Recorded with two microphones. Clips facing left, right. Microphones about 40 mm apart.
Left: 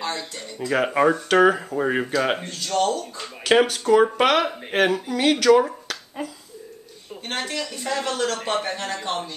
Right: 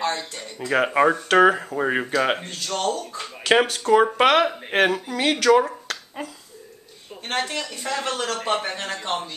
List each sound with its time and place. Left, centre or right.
0.1 s speech: centre